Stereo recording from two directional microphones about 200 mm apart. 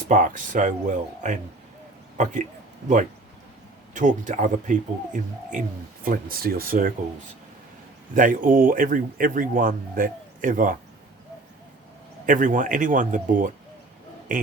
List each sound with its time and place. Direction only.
0.1 s speech: 40° right (ahead or behind)
3.9 s speech: 40° right (ahead or behind)
8.1 s speech: 40° right (ahead or behind)
12.2 s speech: 40° right (ahead or behind)